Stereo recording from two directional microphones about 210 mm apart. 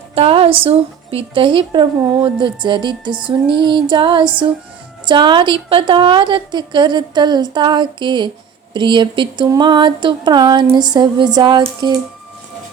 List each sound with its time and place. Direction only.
0.1 s a woman's voice: 25° right (ahead or behind)